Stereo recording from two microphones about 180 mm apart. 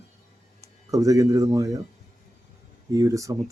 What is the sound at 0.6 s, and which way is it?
Speech, 20° right (ahead or behind).